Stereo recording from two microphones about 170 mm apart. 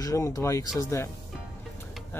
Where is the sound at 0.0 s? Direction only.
20° left (ahead or behind).